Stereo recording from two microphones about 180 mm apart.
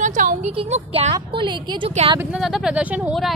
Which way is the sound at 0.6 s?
35° right (ahead or behind).